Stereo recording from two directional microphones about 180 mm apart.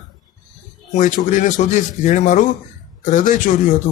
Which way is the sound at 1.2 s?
45° left (ahead or behind).